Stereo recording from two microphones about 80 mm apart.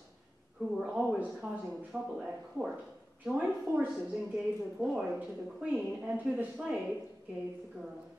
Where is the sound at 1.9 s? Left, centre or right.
Centre.